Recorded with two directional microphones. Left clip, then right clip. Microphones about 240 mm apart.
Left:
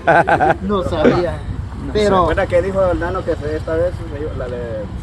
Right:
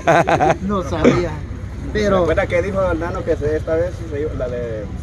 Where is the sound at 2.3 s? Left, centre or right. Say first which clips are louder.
Left 1 dB; centre.